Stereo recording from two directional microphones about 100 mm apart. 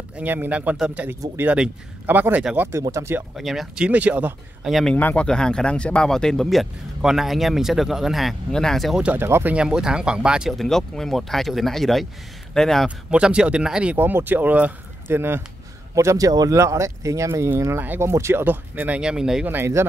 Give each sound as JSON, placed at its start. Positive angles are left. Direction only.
{"t": 0.2, "sound": "speech", "side_deg": -15}
{"t": 3.3, "sound": "speech", "side_deg": 0}
{"t": 4.6, "sound": "speech", "side_deg": 0}
{"t": 4.9, "sound": "speech", "side_deg": 15}
{"t": 9.0, "sound": "speech", "side_deg": -20}
{"t": 12.8, "sound": "speech", "side_deg": -10}
{"t": 13.9, "sound": "speech", "side_deg": -20}
{"t": 18.9, "sound": "speech", "side_deg": -5}
{"t": 19.4, "sound": "speech", "side_deg": -20}